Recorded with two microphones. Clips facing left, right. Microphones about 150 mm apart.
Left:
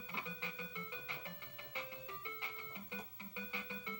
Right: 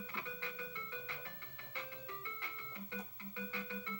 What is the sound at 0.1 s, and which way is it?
Music, 15° left (ahead or behind).